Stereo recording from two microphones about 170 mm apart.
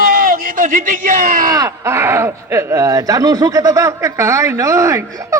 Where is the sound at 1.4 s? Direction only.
20° right (ahead or behind).